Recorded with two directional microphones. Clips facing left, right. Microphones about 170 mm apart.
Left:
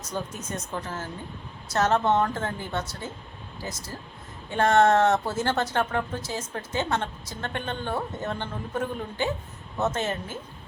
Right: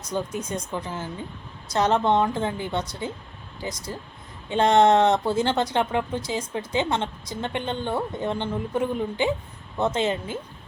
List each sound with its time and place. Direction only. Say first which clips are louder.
0.0 s speech: right 5 dB; 10° right (ahead or behind)